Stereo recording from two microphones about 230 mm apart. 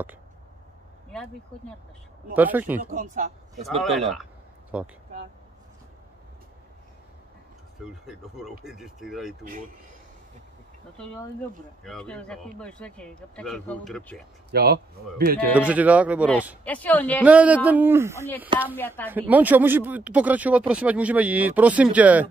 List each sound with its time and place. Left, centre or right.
2.3 s speech: centre
2.9 s speech: right
3.8 s a sound: centre
7.8 s speech: centre
11.8 s speech: centre
14.5 s speech: right
15.5 s speech: centre
16.6 s a woman's voice: centre
17.2 s speech: centre
18.8 s a woman's voice: centre
19.0 s speech: centre